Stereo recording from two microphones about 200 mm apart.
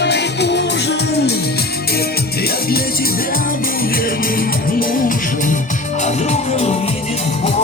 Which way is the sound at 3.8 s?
45° left (ahead or behind).